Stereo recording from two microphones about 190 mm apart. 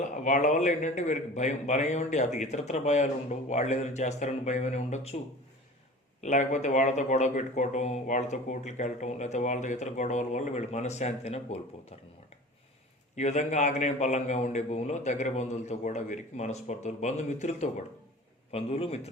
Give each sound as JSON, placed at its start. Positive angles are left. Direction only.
{"t": 0.2, "sound": "speech", "side_deg": 40}
{"t": 6.2, "sound": "speech", "side_deg": 40}
{"t": 13.1, "sound": "speech", "side_deg": 35}